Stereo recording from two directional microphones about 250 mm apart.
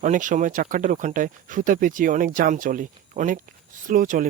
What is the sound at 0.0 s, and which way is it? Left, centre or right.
Speech, right.